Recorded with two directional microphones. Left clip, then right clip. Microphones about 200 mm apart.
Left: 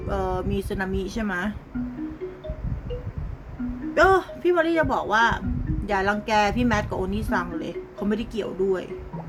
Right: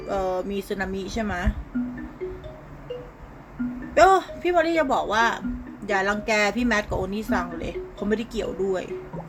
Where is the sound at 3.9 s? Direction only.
15° left (ahead or behind).